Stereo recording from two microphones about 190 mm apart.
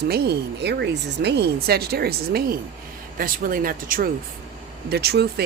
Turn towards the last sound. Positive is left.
turn(degrees=-60)  # may be behind; listen again after turning